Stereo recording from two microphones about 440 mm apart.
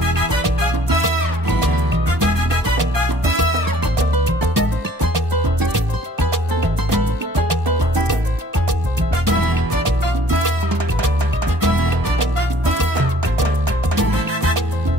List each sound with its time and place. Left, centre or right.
1.0 s music: right
4.4 s music: right
9.2 s music: right
11.6 s music: right
13.9 s music: right